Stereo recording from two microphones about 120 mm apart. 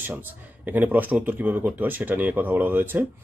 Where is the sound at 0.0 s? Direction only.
15° right (ahead or behind).